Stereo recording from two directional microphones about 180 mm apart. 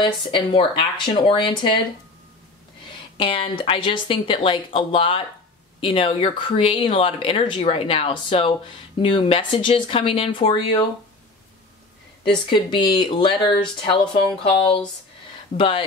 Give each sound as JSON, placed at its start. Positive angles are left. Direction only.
{"t": 0.0, "sound": "speech", "side_deg": 30}
{"t": 3.2, "sound": "speech", "side_deg": 30}
{"t": 12.4, "sound": "speech", "side_deg": 25}